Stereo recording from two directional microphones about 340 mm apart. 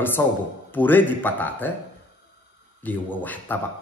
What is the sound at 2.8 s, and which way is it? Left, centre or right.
Speech, centre.